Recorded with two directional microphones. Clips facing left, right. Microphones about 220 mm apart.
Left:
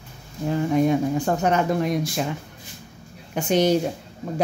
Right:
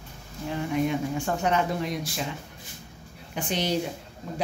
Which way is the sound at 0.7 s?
40° left (ahead or behind).